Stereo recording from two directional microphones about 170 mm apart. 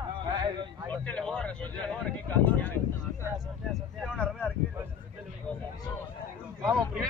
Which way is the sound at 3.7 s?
5° left (ahead or behind).